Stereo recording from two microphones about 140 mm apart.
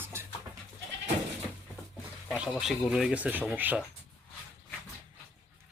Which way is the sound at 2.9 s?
10° right (ahead or behind).